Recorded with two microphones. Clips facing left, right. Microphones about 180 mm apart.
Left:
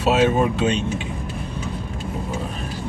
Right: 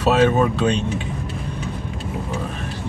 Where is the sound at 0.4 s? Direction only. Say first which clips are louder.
Right 1 dB; 5° left (ahead or behind).